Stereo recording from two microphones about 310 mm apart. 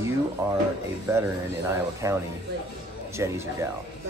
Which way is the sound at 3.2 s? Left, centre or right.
Centre.